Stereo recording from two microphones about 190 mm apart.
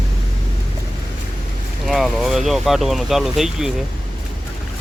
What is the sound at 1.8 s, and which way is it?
Speech, centre (ahead or behind).